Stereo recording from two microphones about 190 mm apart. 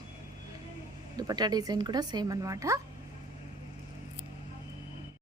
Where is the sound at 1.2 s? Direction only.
20° right (ahead or behind).